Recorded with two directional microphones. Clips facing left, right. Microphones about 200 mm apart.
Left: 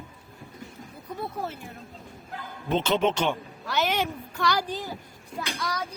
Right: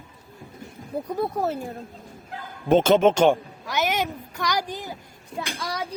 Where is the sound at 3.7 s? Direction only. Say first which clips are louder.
Right 1 dB; 15° right (ahead or behind).